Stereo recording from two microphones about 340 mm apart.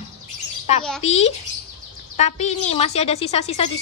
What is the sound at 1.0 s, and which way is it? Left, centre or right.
A woman's voice, centre.